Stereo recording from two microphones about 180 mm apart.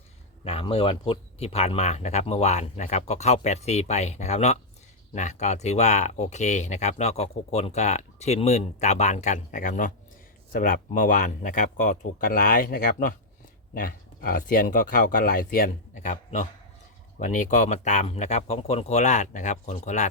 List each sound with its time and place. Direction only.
0.4 s speech: 30° left (ahead or behind)